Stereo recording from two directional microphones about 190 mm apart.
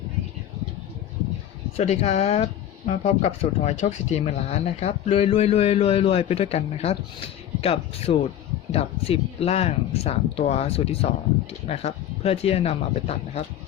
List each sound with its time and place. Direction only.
1.7 s speech: 35° left (ahead or behind)